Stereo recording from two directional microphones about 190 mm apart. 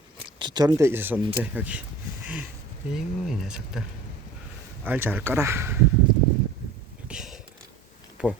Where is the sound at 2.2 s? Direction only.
5° right (ahead or behind).